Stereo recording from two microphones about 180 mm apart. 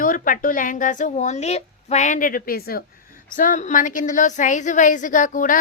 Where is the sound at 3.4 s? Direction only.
45° left (ahead or behind).